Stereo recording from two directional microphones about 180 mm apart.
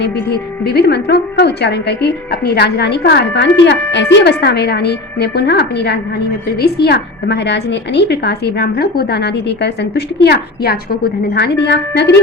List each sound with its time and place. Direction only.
0.0 s a woman's voice: 60° left (ahead or behind)